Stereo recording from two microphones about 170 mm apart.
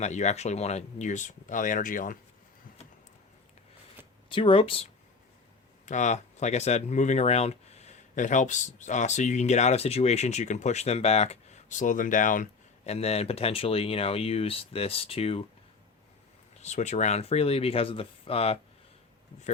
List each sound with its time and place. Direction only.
0.0 s speech: 40° left (ahead or behind)
4.3 s speech: 30° left (ahead or behind)
5.8 s speech: 45° left (ahead or behind)
16.6 s speech: 40° left (ahead or behind)